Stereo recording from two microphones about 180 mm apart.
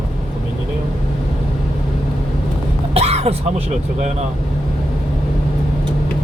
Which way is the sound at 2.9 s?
35° right (ahead or behind).